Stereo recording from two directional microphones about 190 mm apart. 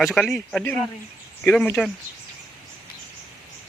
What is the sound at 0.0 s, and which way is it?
A man's voice, centre (ahead or behind).